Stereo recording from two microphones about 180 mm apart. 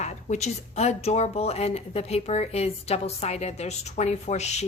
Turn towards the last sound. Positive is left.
turn(degrees=40)  # may be behind; listen again after turning